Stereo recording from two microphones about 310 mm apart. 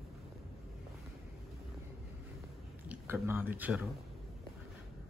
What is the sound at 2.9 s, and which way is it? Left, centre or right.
Speech, centre.